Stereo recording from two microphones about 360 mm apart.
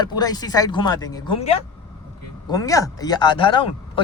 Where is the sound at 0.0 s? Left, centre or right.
Centre.